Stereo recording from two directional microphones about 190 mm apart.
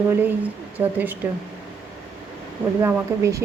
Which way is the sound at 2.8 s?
15° right (ahead or behind).